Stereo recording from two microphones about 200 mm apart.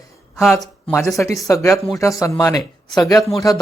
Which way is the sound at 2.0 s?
15° left (ahead or behind).